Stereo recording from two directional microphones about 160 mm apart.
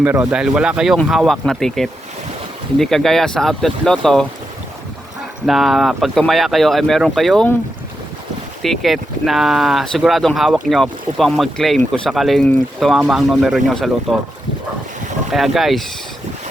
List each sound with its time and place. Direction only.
0.0 s speech: 10° right (ahead or behind)
5.5 s speech: centre (ahead or behind)
8.6 s speech: centre (ahead or behind)
15.3 s speech: centre (ahead or behind)